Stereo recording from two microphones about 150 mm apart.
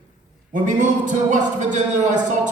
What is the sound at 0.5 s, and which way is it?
Speech, 55° right (ahead or behind).